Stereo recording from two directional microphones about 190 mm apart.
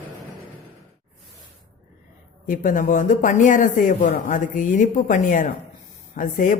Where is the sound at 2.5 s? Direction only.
45° left (ahead or behind).